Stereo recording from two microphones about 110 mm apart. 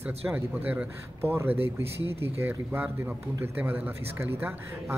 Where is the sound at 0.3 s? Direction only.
15° right (ahead or behind).